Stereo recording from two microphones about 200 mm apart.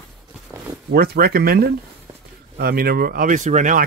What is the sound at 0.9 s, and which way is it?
Speech, 50° right (ahead or behind).